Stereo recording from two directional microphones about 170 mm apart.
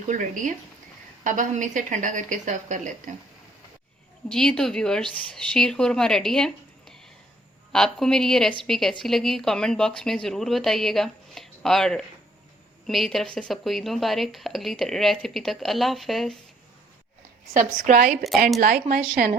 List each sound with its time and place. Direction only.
0.1 s speech: 50° right (ahead or behind)
4.3 s speech: 5° left (ahead or behind)
17.6 s speech: 50° right (ahead or behind)
18.2 s speech: centre (ahead or behind)
18.6 s speech: 55° right (ahead or behind)